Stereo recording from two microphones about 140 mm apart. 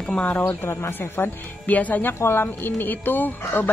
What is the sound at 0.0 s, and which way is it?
A woman's voice, 10° left (ahead or behind).